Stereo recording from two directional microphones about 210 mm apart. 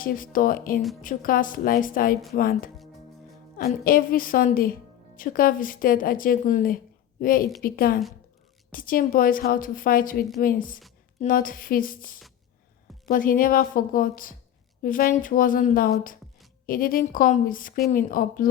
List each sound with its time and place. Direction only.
0.0 s a woman's voice: 40° left (ahead or behind)
3.8 s a woman's voice: 45° left (ahead or behind)